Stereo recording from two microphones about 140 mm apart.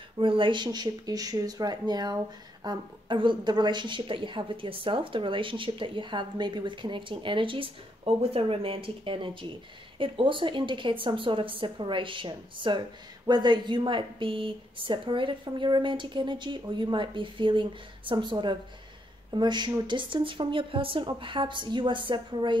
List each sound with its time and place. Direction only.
0.2 s a woman's voice: 35° right (ahead or behind)